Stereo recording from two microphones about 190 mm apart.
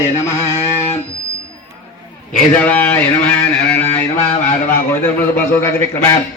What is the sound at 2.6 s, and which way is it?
Speech, 10° left (ahead or behind).